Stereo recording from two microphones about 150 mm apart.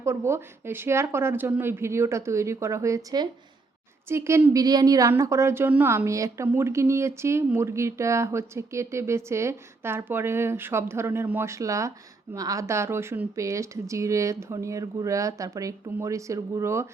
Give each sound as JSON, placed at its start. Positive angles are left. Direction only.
{"t": 0.0, "sound": "speech", "side_deg": -15}